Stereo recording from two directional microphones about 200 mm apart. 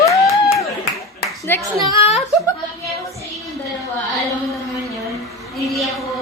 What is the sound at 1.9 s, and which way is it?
Speech, 30° left (ahead or behind).